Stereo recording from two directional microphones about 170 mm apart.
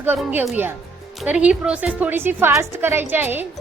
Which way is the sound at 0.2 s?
5° right (ahead or behind).